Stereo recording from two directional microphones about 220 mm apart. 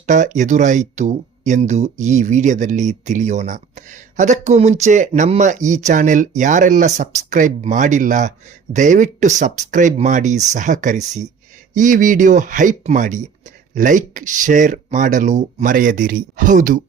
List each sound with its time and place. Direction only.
0.0 s speech: 35° right (ahead or behind)